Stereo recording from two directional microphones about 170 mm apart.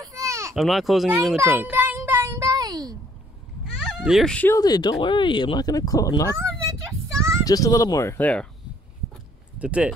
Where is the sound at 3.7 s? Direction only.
5° right (ahead or behind).